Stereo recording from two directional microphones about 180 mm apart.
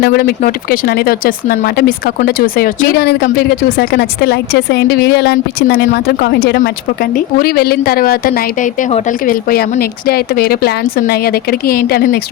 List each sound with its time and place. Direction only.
0.0 s a woman's voice: 55° left (ahead or behind)
6.6 s a woman's voice: 50° left (ahead or behind)